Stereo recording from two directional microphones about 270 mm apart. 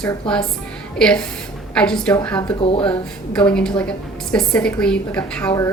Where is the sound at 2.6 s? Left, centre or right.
Centre.